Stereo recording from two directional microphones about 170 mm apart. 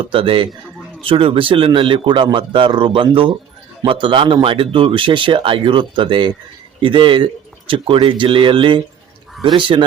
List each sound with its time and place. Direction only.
0.0 s speech: 30° right (ahead or behind)